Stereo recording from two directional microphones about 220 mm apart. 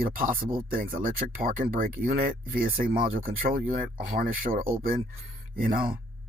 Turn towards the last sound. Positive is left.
turn(degrees=-40)  # may be behind; listen again after turning